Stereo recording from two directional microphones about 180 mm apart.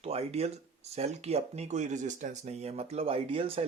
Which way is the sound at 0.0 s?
35° right (ahead or behind).